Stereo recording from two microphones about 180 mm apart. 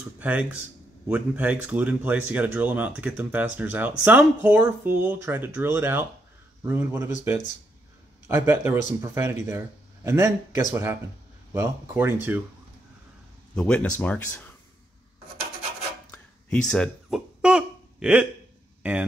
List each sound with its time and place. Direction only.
0.2 s speech: 10° right (ahead or behind)
8.3 s speech: 15° right (ahead or behind)
13.6 s speech: 5° left (ahead or behind)
16.4 s speech: 5° left (ahead or behind)